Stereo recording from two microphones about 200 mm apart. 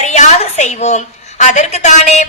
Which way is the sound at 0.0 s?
35° left (ahead or behind).